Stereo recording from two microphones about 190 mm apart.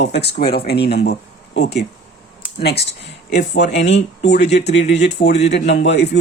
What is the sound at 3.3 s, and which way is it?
Speech, 65° left (ahead or behind).